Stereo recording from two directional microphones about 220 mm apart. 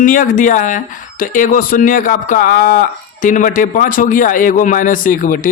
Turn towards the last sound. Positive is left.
turn(degrees=40)  # may be behind; listen again after turning